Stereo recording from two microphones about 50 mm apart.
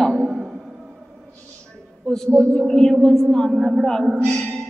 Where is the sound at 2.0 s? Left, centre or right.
Centre.